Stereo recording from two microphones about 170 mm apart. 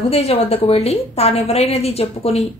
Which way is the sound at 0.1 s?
35° left (ahead or behind).